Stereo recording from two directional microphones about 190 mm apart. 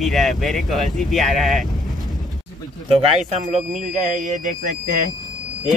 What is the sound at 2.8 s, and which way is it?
Speech, 35° right (ahead or behind).